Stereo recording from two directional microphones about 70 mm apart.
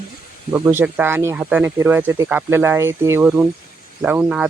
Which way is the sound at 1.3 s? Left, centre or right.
Right.